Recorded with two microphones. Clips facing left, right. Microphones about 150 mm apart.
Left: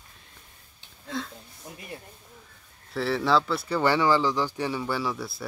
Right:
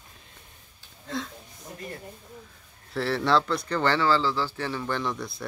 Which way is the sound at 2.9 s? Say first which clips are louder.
Even; centre (ahead or behind).